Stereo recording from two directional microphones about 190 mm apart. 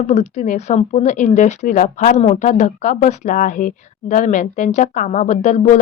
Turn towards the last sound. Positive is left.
turn(degrees=40)  # may be behind; listen again after turning